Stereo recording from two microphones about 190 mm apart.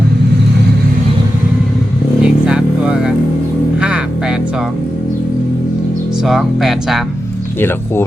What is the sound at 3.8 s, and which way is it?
Music, 5° right (ahead or behind).